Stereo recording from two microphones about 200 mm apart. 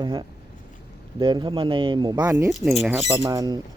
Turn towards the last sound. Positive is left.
turn(degrees=-20)  # may be behind; listen again after turning